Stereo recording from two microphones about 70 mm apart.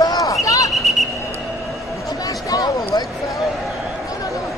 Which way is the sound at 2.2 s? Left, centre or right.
Left.